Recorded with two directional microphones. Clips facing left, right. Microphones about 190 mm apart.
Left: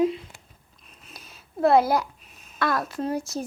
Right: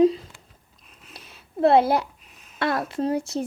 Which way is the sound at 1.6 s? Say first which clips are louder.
Right 1 dB; 25° right (ahead or behind).